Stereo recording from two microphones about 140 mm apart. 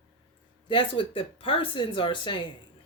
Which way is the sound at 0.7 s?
40° left (ahead or behind).